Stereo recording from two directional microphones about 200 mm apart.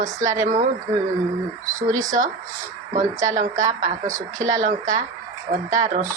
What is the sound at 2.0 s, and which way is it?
Speech, 40° right (ahead or behind).